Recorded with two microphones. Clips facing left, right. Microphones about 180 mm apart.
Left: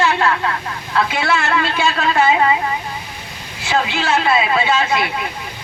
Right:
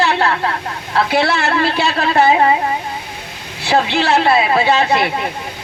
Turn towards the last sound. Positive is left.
turn(degrees=-35)  # may be behind; listen again after turning